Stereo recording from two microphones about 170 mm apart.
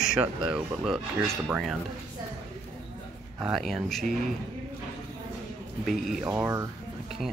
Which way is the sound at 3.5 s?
Centre (ahead or behind).